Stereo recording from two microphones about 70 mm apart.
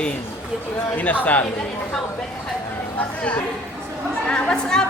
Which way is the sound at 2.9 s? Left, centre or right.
Left.